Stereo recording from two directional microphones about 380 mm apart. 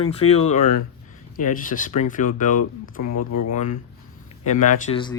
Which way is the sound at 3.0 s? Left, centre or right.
Left.